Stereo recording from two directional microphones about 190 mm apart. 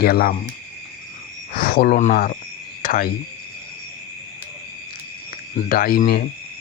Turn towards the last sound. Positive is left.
turn(degrees=50)  # may be behind; listen again after turning